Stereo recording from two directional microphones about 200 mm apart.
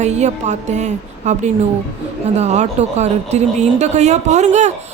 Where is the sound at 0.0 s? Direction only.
35° right (ahead or behind).